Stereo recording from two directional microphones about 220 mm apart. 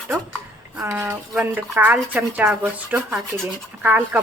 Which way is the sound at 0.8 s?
15° right (ahead or behind).